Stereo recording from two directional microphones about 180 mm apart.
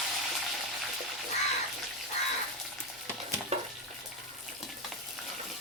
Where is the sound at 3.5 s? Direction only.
35° right (ahead or behind).